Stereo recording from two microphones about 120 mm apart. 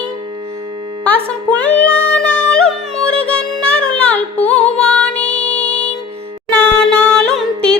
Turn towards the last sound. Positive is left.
turn(degrees=10)  # may be behind; listen again after turning